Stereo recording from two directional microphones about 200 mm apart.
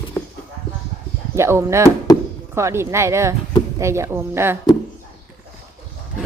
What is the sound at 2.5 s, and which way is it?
A woman's voice, 15° right (ahead or behind).